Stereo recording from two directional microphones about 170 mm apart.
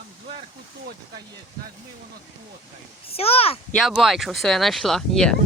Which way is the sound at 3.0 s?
35° left (ahead or behind).